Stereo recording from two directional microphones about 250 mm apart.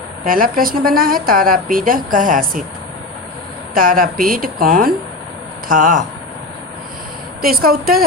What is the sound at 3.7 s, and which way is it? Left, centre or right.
A woman's voice, right.